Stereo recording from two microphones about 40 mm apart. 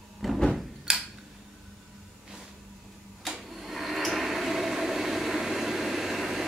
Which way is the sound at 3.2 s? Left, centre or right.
Centre.